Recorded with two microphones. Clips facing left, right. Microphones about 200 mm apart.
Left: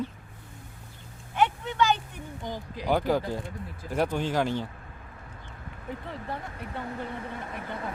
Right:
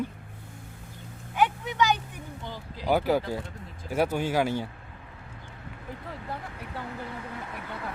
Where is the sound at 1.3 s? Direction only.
10° right (ahead or behind).